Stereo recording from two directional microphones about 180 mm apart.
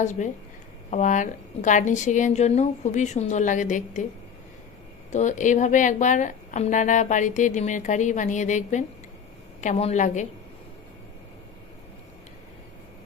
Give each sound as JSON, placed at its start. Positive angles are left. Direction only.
{"t": 0.0, "sound": "a woman's voice", "side_deg": 40}
{"t": 5.1, "sound": "a woman's voice", "side_deg": 45}